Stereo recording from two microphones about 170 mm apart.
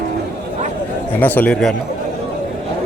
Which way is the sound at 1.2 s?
10° left (ahead or behind).